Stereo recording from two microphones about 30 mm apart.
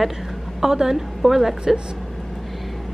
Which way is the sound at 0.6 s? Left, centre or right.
Centre.